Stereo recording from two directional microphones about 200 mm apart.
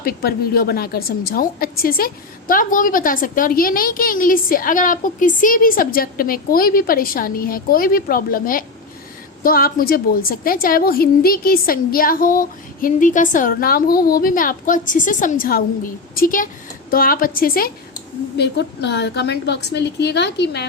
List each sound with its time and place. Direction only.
0.0 s a woman's voice: 50° left (ahead or behind)